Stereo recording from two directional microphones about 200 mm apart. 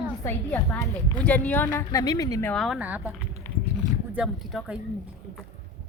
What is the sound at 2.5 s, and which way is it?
Speech, centre (ahead or behind).